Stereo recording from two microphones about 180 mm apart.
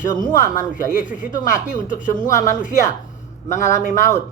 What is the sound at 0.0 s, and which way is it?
A woman's voice, 45° left (ahead or behind).